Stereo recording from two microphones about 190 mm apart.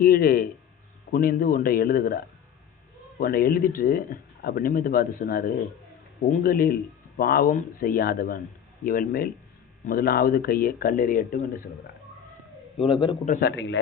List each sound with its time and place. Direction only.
0.0 s speech: 55° left (ahead or behind)
12.9 s a man's voice: 25° left (ahead or behind)
13.4 s a man's voice: 70° left (ahead or behind)